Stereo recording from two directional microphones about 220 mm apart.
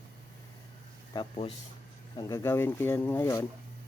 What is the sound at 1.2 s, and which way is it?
Speech, 25° left (ahead or behind).